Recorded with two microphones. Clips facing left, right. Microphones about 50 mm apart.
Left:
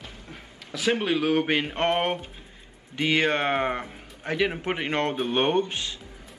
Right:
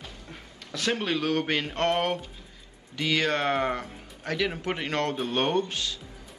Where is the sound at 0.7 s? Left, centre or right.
Centre.